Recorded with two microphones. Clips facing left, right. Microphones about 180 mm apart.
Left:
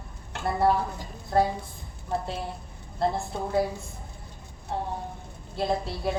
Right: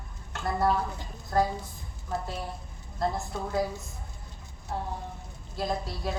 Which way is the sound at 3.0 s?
30° left (ahead or behind).